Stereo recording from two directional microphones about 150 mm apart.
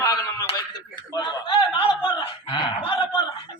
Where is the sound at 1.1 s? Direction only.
35° left (ahead or behind).